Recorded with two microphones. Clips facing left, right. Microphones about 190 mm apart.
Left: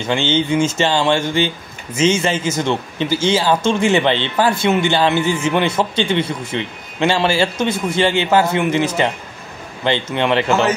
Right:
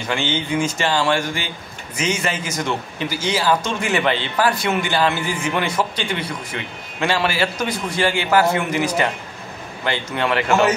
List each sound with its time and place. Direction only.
0.1 s a man's voice: 25° left (ahead or behind)